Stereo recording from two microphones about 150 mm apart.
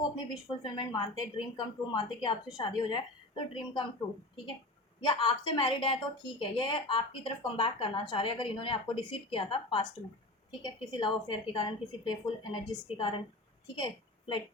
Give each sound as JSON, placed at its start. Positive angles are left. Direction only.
{"t": 0.6, "sound": "a woman's voice", "side_deg": 30}
{"t": 5.0, "sound": "a woman's voice", "side_deg": 35}